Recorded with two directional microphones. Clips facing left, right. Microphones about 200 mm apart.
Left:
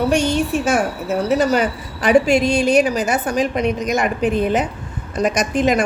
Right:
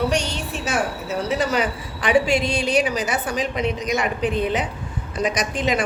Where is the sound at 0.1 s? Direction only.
50° left (ahead or behind).